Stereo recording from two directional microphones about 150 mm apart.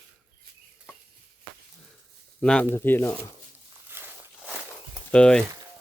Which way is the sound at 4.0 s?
15° right (ahead or behind).